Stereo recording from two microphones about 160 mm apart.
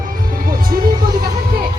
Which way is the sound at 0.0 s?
60° right (ahead or behind).